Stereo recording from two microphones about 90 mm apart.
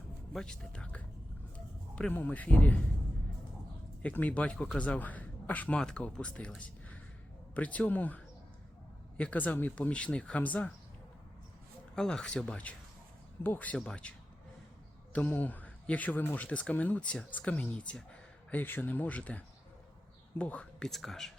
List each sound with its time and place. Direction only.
0.3 s speech: 10° left (ahead or behind)
1.5 s dog: 15° left (ahead or behind)
2.1 s speech: 15° left (ahead or behind)
4.0 s speech: 15° left (ahead or behind)
6.6 s a sound: 15° left (ahead or behind)
7.5 s speech: 15° left (ahead or behind)
11.9 s speech: 5° left (ahead or behind)
15.1 s speech: 15° left (ahead or behind)